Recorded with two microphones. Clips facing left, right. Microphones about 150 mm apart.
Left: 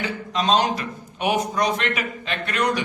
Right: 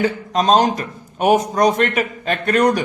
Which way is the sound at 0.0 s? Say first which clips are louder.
Right 7 dB; 45° right (ahead or behind).